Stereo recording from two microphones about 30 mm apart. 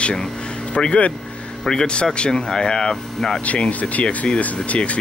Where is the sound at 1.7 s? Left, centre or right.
Left.